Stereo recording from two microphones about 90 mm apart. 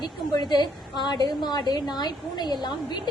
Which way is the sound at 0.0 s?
50° left (ahead or behind).